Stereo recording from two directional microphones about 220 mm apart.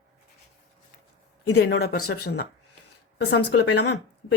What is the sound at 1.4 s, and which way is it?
Speech, 50° left (ahead or behind).